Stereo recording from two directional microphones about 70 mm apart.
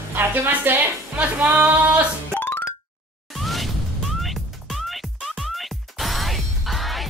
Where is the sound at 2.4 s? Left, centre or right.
Left.